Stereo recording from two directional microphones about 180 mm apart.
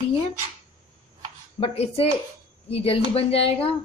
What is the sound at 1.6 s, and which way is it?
A woman's voice, 30° left (ahead or behind).